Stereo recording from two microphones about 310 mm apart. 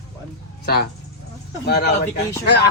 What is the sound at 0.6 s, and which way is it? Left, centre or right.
Speech, left.